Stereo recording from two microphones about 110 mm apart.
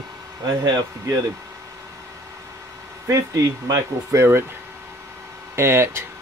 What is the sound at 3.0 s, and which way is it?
Speech, 30° right (ahead or behind).